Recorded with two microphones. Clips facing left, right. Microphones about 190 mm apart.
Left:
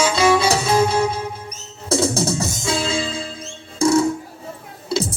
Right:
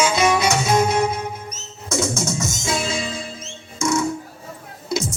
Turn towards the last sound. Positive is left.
turn(degrees=30)  # may be behind; listen again after turning